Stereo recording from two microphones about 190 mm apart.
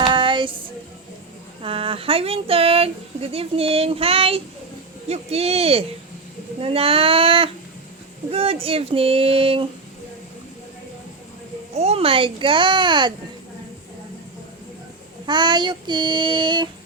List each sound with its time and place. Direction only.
0.0 s music: 25° right (ahead or behind)
1.6 s speech: 30° right (ahead or behind)
11.7 s speech: 35° right (ahead or behind)
15.3 s speech: 25° right (ahead or behind)